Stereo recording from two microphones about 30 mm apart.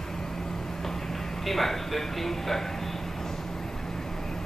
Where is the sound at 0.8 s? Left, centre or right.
Centre.